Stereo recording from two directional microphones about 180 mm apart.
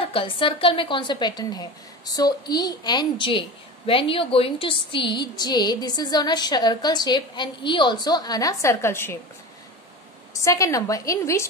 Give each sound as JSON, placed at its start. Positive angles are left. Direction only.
{"t": 0.0, "sound": "a woman's voice", "side_deg": 30}
{"t": 10.4, "sound": "a woman's voice", "side_deg": 15}